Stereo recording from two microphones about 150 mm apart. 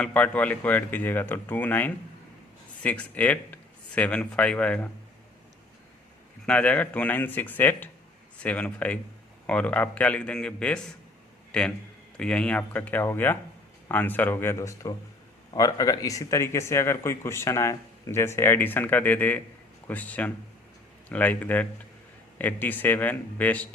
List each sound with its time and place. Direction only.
0.0 s speech: 10° left (ahead or behind)
6.4 s a man's voice: 10° left (ahead or behind)